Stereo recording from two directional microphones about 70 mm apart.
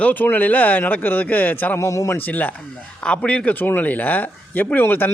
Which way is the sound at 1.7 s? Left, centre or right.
Left.